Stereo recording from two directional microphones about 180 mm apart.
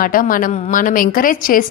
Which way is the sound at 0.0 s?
50° left (ahead or behind).